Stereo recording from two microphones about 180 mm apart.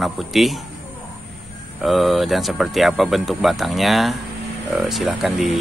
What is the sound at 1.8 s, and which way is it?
Speech, centre (ahead or behind).